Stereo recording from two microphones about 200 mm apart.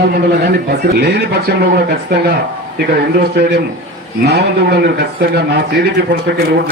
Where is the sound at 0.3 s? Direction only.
55° right (ahead or behind).